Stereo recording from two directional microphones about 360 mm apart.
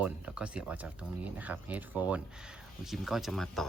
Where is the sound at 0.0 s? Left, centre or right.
Centre.